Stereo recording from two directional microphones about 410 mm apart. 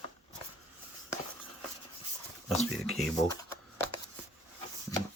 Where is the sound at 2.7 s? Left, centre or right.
Centre.